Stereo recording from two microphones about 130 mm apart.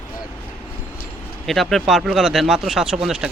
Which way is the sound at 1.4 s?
Centre (ahead or behind).